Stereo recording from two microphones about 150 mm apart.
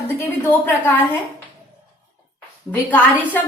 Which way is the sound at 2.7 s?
10° left (ahead or behind).